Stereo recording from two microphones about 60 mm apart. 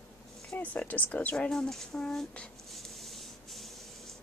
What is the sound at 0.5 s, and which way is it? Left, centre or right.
Speech, left.